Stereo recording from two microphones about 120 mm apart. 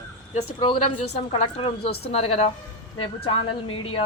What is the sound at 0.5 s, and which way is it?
A woman's voice, 45° left (ahead or behind).